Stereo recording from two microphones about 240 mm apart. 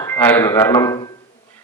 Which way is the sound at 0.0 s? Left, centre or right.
Centre.